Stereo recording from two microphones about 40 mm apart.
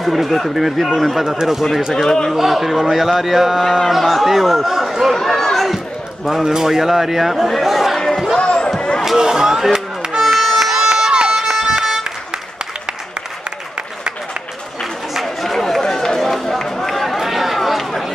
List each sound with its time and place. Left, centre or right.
0.0 s speech: centre
2.0 s a man's voice: centre
2.3 s speech: centre
5.2 s speech: centre
6.3 s speech: centre
8.4 s a sound: left
8.7 s vehicle: left
9.0 s music: centre
10.2 s music: centre
10.6 s run: centre
11.3 s bagpipes: centre
11.8 s music: centre
15.2 s run: centre